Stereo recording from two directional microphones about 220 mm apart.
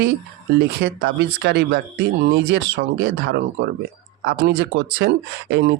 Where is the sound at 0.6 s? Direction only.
45° right (ahead or behind).